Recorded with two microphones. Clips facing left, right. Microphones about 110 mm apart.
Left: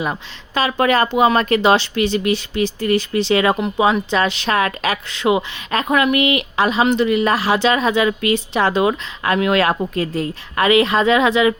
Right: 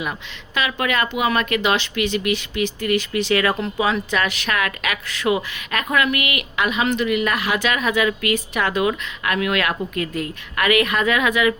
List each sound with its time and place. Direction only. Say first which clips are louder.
0.0 s speech: left 5 dB; 35° left (ahead or behind)